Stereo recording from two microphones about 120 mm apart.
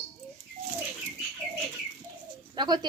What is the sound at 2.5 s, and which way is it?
Bird, 40° right (ahead or behind).